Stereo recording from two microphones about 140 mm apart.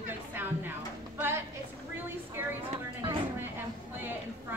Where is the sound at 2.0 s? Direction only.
15° right (ahead or behind).